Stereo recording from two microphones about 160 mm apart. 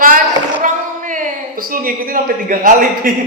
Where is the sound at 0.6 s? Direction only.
55° right (ahead or behind).